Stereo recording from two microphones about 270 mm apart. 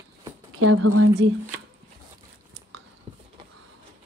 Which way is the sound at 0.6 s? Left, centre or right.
Right.